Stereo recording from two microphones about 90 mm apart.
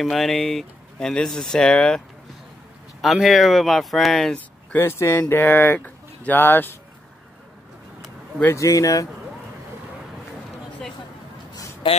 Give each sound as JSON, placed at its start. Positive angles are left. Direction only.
{"t": 0.0, "sound": "speech", "side_deg": 0}
{"t": 4.7, "sound": "speech", "side_deg": 30}
{"t": 8.5, "sound": "speech", "side_deg": 35}